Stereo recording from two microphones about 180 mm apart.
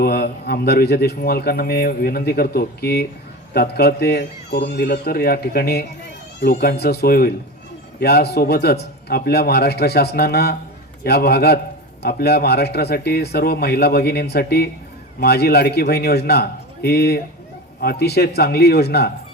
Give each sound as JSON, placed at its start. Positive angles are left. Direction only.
{"t": 0.0, "sound": "a man's voice", "side_deg": 60}